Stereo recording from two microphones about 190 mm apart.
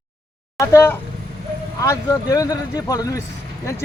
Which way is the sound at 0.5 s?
15° left (ahead or behind).